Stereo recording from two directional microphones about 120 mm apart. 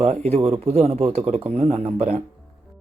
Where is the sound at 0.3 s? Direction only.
60° right (ahead or behind).